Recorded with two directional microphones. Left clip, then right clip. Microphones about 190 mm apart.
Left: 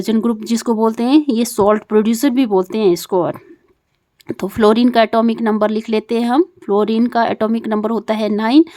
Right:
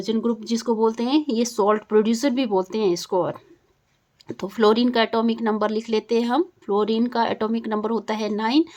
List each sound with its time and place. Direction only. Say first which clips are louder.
0.0 s speech: left 6 dB; 40° left (ahead or behind)